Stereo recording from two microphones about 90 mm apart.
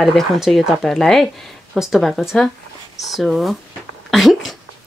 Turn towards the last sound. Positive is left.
turn(degrees=0)  # may be behind; listen again after turning